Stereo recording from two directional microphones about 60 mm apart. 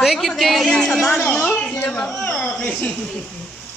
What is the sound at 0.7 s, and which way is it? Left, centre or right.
A woman's voice, centre.